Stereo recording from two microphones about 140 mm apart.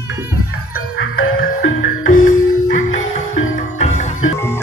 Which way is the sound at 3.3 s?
55° left (ahead or behind).